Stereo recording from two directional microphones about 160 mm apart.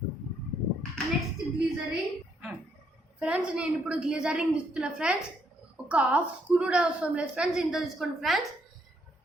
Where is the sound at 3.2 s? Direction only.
5° right (ahead or behind).